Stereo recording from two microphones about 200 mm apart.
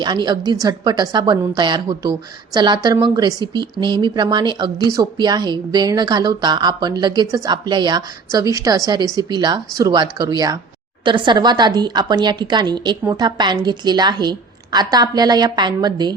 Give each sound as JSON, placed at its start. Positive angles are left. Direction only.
{"t": 0.0, "sound": "a woman's voice", "side_deg": -20}